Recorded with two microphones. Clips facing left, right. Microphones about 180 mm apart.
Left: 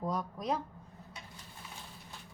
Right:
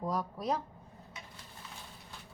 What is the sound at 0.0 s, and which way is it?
Speech, centre (ahead or behind).